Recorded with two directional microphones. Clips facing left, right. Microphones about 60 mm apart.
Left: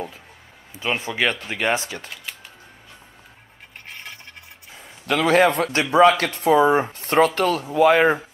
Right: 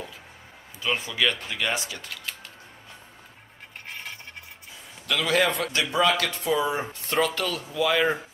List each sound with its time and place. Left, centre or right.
0.8 s speech: left
4.7 s a man's voice: left